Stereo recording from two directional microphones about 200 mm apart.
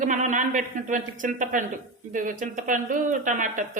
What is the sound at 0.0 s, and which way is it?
Speech, 40° right (ahead or behind).